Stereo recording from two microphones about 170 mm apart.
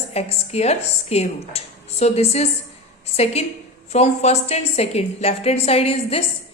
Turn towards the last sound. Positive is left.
turn(degrees=35)  # may be behind; listen again after turning